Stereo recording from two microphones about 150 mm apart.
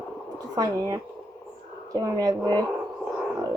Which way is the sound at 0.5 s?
25° right (ahead or behind).